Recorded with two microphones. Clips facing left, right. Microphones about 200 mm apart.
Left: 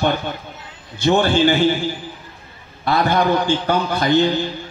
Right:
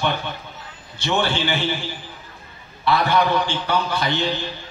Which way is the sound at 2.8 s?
45° left (ahead or behind).